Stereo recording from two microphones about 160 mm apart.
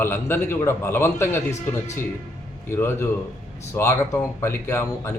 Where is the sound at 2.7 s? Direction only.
15° left (ahead or behind).